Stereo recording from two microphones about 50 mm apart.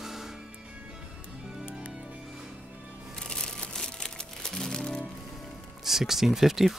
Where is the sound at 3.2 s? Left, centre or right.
Centre.